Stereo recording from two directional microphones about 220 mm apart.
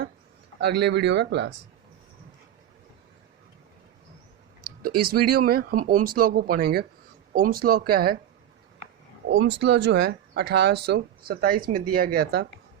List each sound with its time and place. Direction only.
0.6 s speech: 50° right (ahead or behind)
4.9 s speech: 45° right (ahead or behind)
9.4 s speech: 50° right (ahead or behind)